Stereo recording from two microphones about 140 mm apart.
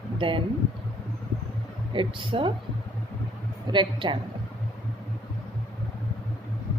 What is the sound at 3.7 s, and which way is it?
Speech, 35° right (ahead or behind).